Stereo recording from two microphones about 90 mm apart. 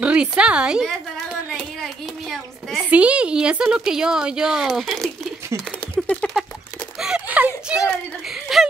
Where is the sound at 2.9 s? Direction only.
15° right (ahead or behind).